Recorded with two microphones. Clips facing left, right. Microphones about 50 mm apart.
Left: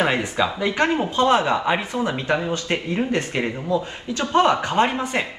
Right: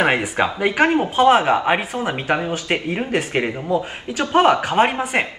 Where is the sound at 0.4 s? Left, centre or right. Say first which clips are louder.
Right 3 dB; right.